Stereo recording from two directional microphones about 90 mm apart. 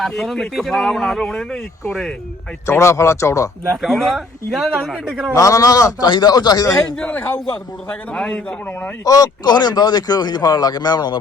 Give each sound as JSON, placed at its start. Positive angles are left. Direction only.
{"t": 0.0, "sound": "speech", "side_deg": 0}
{"t": 2.6, "sound": "speech", "side_deg": 30}
{"t": 3.8, "sound": "speech", "side_deg": 0}
{"t": 5.3, "sound": "speech", "side_deg": 40}
{"t": 6.9, "sound": "a man's voice", "side_deg": 15}
{"t": 9.0, "sound": "speech", "side_deg": 45}